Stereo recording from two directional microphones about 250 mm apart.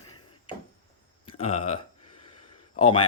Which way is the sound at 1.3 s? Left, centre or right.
Left.